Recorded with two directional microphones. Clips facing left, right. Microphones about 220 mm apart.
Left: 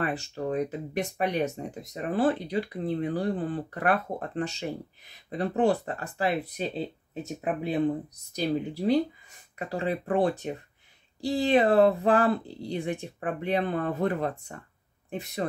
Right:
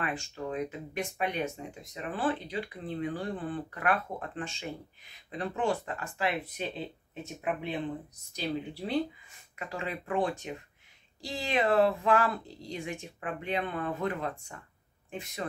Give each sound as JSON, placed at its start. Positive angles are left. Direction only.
{"t": 0.0, "sound": "speech", "side_deg": 40}
{"t": 8.4, "sound": "speech", "side_deg": 40}